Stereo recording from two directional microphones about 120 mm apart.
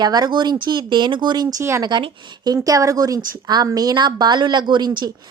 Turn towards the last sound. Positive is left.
turn(degrees=-40)  # may be behind; listen again after turning